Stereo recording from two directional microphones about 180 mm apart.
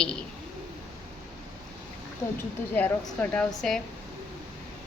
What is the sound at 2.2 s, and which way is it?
Speech, 15° left (ahead or behind).